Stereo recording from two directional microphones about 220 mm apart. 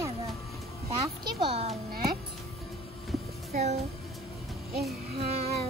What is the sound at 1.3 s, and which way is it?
Speech, 25° right (ahead or behind).